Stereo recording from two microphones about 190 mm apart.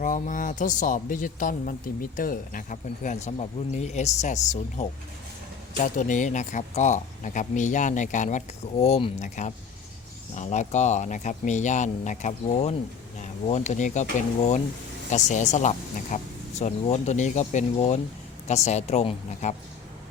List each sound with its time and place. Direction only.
0.0 s speech: 45° left (ahead or behind)